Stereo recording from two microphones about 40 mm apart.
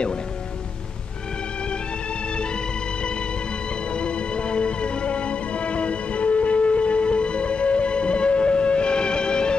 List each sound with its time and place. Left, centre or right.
2.3 s music: left